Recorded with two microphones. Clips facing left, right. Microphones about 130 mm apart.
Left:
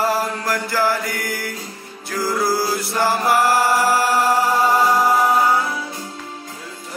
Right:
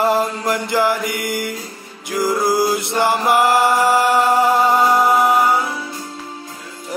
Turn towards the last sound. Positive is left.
turn(degrees=-20)  # may be behind; listen again after turning